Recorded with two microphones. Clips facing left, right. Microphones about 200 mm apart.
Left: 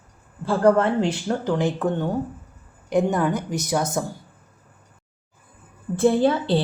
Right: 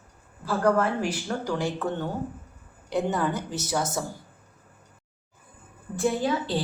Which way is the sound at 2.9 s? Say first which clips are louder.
Left 5 dB; 15° left (ahead or behind).